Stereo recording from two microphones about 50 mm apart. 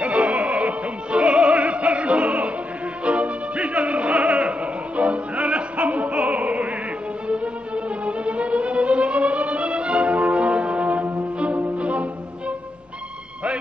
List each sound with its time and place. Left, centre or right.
0.0 s music: right